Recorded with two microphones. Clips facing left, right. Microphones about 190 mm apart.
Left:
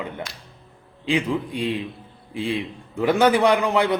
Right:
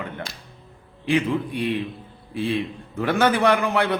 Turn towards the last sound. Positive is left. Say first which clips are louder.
# left 1 dB
turn(degrees=15)  # may be behind; listen again after turning